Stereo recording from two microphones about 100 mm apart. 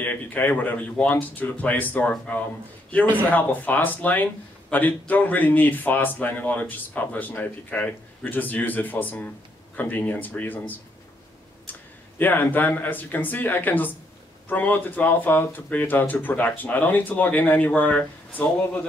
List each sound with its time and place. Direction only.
0.0 s speech: 15° left (ahead or behind)
11.7 s a sound: 20° left (ahead or behind)
12.2 s speech: 20° left (ahead or behind)